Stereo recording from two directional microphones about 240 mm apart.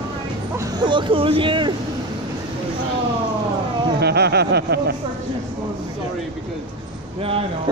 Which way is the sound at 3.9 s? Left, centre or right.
Right.